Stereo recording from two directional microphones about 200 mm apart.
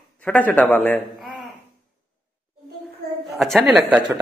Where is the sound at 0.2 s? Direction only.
10° left (ahead or behind).